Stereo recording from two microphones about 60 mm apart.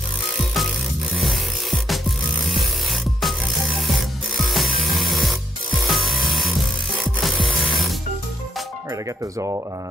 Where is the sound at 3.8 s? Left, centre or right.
Centre.